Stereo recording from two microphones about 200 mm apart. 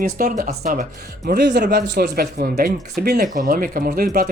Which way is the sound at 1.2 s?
55° right (ahead or behind).